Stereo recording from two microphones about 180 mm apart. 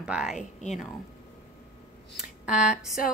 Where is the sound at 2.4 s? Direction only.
5° right (ahead or behind).